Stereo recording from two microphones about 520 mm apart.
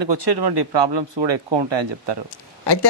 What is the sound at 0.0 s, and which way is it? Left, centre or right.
Speech, right.